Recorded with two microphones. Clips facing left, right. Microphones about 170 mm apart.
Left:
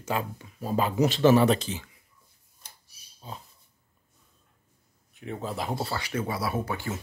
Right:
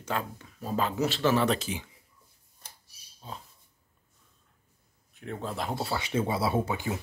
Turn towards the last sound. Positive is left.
turn(degrees=-20)  # may be behind; listen again after turning